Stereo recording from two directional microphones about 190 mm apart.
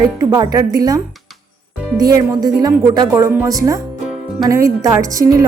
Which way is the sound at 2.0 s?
20° right (ahead or behind).